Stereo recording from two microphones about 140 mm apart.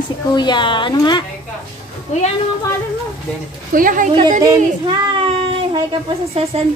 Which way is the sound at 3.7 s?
70° right (ahead or behind).